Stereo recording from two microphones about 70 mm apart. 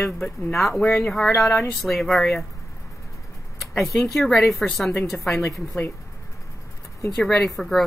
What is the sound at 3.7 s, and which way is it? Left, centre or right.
A woman's voice, centre.